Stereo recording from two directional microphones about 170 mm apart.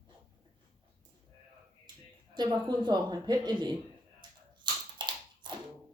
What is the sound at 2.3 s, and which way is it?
A woman's voice, 25° right (ahead or behind).